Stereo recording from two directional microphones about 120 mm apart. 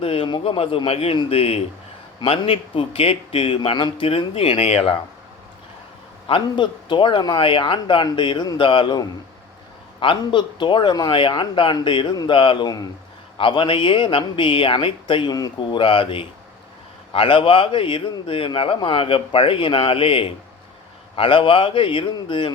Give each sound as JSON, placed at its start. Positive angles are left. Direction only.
{"t": 0.0, "sound": "a man's voice", "side_deg": 55}
{"t": 0.3, "sound": "a man's voice", "side_deg": 45}
{"t": 6.2, "sound": "a man's voice", "side_deg": 45}
{"t": 13.4, "sound": "a man's voice", "side_deg": 45}